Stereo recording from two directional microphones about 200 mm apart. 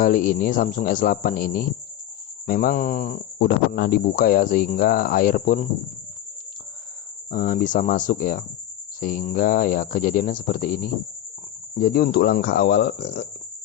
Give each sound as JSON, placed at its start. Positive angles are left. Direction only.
{"t": 0.0, "sound": "speech", "side_deg": 45}
{"t": 7.3, "sound": "speech", "side_deg": 40}